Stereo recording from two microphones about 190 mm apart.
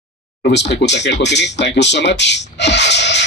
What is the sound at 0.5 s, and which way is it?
Speech, 65° left (ahead or behind).